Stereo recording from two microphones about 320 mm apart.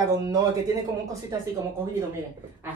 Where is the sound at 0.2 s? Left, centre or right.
Centre.